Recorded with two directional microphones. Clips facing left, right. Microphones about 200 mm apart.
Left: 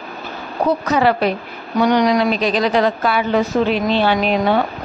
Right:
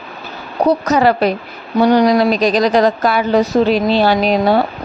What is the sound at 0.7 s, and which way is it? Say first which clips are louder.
A woman's voice: right 3 dB; 40° right (ahead or behind).